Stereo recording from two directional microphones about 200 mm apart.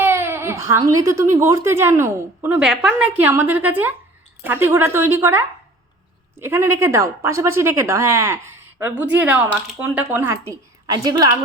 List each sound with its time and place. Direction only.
0.0 s a woman's voice: 10° right (ahead or behind)